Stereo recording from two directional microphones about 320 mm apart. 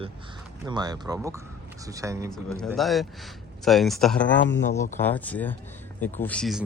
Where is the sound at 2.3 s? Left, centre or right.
Centre.